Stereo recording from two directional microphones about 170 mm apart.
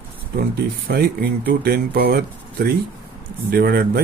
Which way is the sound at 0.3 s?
65° right (ahead or behind).